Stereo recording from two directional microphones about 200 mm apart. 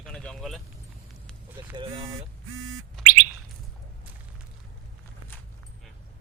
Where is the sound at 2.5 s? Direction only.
90° right.